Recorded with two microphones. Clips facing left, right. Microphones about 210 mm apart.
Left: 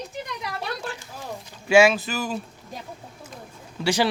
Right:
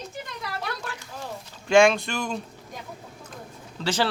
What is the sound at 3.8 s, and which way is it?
Speech, 15° left (ahead or behind).